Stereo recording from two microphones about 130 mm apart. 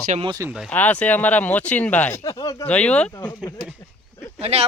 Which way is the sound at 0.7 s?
10° left (ahead or behind).